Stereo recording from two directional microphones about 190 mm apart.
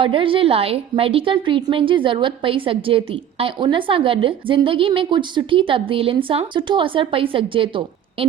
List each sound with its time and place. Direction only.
0.0 s a woman's voice: 25° right (ahead or behind)